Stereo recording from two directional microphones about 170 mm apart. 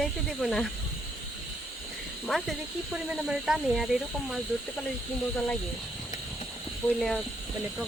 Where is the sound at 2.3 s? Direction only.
Centre (ahead or behind).